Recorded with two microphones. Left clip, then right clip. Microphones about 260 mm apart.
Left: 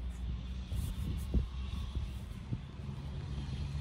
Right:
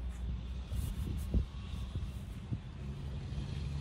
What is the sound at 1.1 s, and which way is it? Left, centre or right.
Hum, left.